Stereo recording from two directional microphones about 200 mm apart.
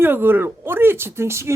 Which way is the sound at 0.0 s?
10° right (ahead or behind).